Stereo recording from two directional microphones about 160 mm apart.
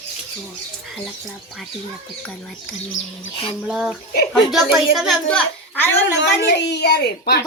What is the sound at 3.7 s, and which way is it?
A child's voice, 5° right (ahead or behind).